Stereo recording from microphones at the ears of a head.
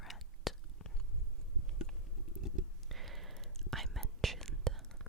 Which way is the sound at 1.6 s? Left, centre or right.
Left.